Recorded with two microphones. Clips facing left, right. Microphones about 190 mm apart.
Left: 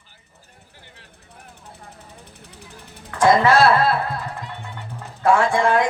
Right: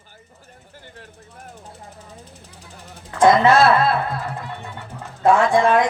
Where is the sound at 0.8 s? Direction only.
50° right (ahead or behind).